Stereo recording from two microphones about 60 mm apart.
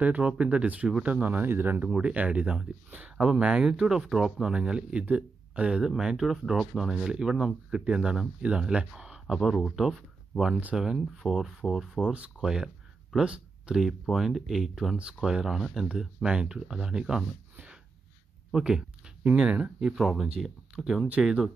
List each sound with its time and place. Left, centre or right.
0.0 s speech: right
1.9 s speech: centre
9.3 s speech: centre
12.0 s speech: right
12.4 s speech: centre
13.8 s speech: centre
18.5 s a sound: centre
19.3 s speech: centre